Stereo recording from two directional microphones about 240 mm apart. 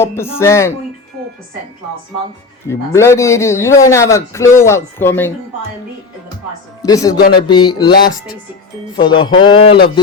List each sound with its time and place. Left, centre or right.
0.3 s a man's voice: centre
2.6 s a man's voice: centre
6.8 s a man's voice: centre
9.0 s music: centre